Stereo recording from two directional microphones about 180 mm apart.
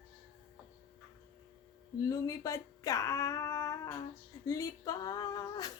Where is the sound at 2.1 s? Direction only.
20° left (ahead or behind).